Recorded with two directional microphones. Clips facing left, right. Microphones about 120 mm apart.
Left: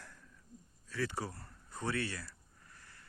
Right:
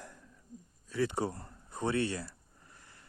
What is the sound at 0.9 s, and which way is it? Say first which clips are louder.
Speech: right 6 dB; 20° right (ahead or behind).